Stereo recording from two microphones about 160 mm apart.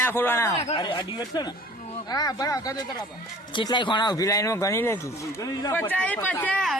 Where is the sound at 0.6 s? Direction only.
30° left (ahead or behind).